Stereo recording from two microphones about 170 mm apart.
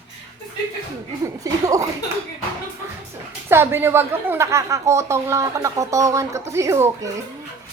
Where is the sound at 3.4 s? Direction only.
15° right (ahead or behind).